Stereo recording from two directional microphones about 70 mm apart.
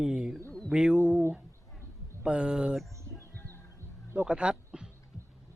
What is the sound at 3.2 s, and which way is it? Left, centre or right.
Music, left.